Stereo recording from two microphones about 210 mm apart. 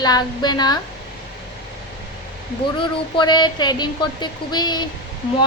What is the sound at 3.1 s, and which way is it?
A woman's voice, 20° left (ahead or behind).